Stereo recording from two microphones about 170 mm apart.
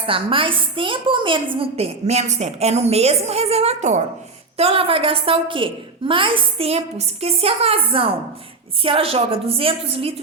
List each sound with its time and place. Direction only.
0.1 s a woman's voice: 30° right (ahead or behind)